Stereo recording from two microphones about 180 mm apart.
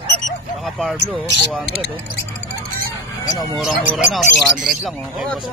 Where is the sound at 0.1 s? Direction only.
50° left (ahead or behind).